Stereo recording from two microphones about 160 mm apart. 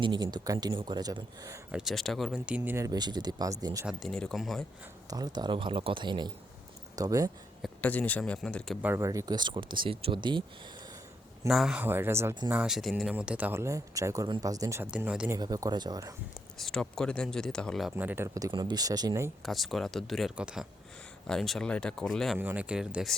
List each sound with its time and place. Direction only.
0.0 s speech: 25° right (ahead or behind)
1.7 s speech: centre (ahead or behind)
2.6 s speech: 20° right (ahead or behind)
3.8 s speech: centre (ahead or behind)
5.1 s speech: 25° right (ahead or behind)
7.6 s a man's voice: 10° left (ahead or behind)
8.8 s speech: 15° right (ahead or behind)
11.4 s speech: centre (ahead or behind); by 14.8 s 20° right (ahead or behind)
14.8 s speech: 5° right (ahead or behind)
15.3 s speech: 25° right (ahead or behind)
16.6 s speech: centre (ahead or behind)
17.9 s speech: 15° right (ahead or behind)
19.4 s speech: centre (ahead or behind)
22.4 s speech: 10° right (ahead or behind)